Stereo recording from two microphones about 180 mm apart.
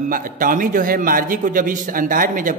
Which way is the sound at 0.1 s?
50° right (ahead or behind).